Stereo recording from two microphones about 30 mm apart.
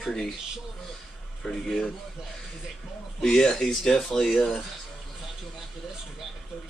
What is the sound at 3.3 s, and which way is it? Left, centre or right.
Speech, centre.